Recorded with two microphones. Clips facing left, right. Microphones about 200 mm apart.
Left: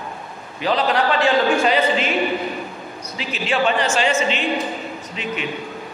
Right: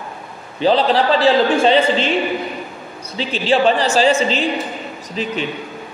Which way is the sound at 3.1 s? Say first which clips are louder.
Right 5 dB; 30° right (ahead or behind).